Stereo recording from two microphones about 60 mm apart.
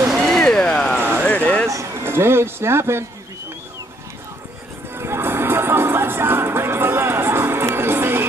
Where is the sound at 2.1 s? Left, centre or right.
Right.